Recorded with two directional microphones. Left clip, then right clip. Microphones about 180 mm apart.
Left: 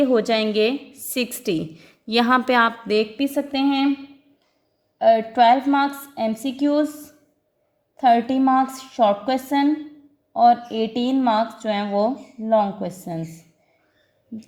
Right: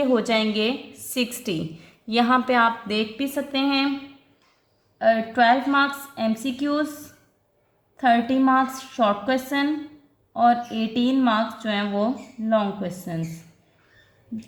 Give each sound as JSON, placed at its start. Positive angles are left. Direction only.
{"t": 0.0, "sound": "a woman's voice", "side_deg": 35}
{"t": 4.9, "sound": "a woman's voice", "side_deg": 30}
{"t": 7.9, "sound": "speech", "side_deg": 30}